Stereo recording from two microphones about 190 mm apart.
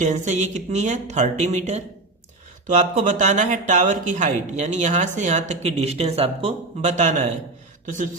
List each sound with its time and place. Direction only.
0.0 s speech: 40° right (ahead or behind)